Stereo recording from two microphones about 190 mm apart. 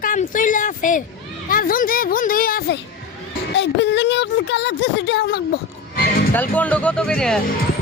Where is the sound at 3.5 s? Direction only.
65° left (ahead or behind).